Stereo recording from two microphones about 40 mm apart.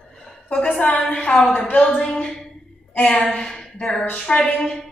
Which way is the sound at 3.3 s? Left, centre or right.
Centre.